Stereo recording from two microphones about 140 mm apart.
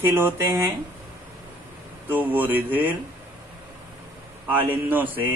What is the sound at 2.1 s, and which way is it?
Speech, 15° right (ahead or behind).